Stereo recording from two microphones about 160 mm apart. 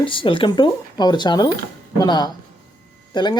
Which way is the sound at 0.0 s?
30° left (ahead or behind).